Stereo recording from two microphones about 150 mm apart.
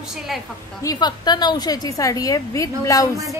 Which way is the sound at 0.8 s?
30° left (ahead or behind).